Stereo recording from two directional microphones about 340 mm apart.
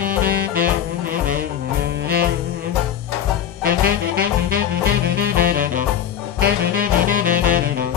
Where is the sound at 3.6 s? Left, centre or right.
Right.